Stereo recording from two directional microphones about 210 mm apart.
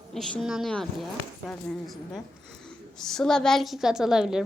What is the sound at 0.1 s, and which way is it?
A woman's voice, centre (ahead or behind).